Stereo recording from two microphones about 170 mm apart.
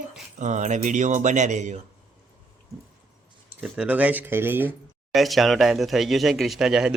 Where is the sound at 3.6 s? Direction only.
10° right (ahead or behind).